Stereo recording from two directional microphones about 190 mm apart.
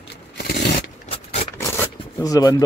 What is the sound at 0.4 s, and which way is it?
Zipper, 60° left (ahead or behind).